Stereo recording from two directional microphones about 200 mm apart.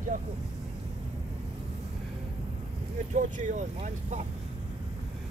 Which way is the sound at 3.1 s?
40° right (ahead or behind).